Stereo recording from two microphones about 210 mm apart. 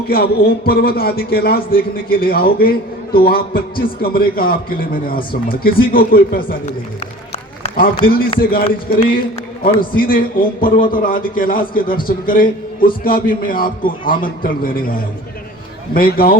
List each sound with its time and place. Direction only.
0.1 s a man's voice: 45° left (ahead or behind)
7.6 s a man's voice: 30° left (ahead or behind)
8.4 s a man's voice: 45° left (ahead or behind)